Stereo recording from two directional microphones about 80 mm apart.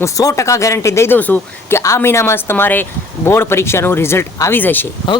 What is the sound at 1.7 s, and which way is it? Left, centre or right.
Speech, left.